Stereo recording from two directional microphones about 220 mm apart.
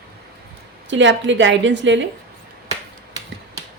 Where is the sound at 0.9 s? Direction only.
55° right (ahead or behind).